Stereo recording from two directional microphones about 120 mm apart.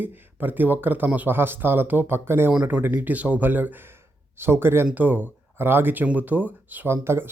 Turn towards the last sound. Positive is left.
turn(degrees=-20)  # may be behind; listen again after turning